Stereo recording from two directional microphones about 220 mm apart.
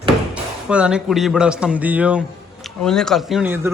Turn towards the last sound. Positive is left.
turn(degrees=-10)  # may be behind; listen again after turning